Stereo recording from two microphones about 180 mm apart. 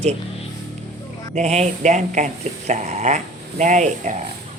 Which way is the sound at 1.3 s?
40° right (ahead or behind).